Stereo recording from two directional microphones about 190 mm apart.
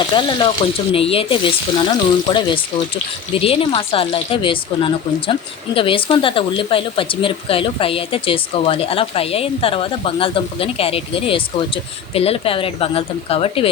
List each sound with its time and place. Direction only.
0.1 s speech: 25° left (ahead or behind)